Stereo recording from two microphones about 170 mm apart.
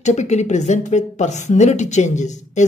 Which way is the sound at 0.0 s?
45° left (ahead or behind).